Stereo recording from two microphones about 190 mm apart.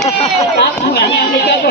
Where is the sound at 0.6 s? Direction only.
60° left (ahead or behind).